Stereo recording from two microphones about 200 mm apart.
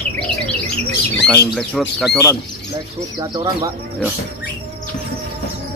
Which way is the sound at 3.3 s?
20° right (ahead or behind).